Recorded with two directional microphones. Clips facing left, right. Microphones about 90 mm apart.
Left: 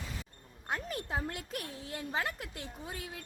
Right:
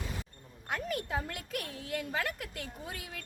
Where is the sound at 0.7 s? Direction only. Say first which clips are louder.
Right 2 dB; 30° left (ahead or behind).